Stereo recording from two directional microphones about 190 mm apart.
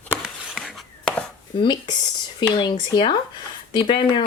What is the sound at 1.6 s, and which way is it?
Speech, 25° left (ahead or behind).